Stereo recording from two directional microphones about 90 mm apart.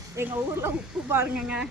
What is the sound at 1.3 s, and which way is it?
Speech, 10° right (ahead or behind).